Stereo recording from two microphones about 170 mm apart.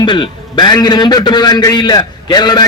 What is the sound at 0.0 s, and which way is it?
A man's voice, 25° left (ahead or behind).